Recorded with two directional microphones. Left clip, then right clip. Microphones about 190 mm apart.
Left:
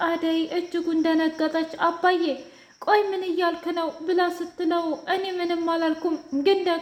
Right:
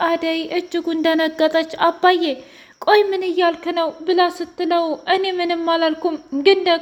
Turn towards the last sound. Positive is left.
turn(degrees=-25)  # may be behind; listen again after turning